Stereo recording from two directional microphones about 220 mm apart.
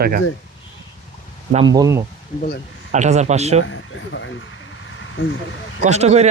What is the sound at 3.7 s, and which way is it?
Speech, 60° left (ahead or behind).